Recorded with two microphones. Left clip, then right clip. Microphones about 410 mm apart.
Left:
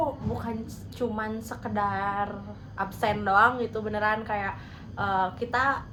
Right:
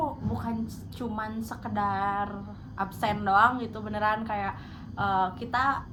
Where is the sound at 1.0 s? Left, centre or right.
Centre.